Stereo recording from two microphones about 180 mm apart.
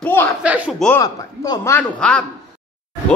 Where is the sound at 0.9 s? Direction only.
20° left (ahead or behind); by 2.2 s 5° left (ahead or behind).